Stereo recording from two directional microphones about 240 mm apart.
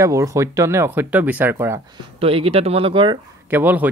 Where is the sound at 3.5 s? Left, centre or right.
Centre.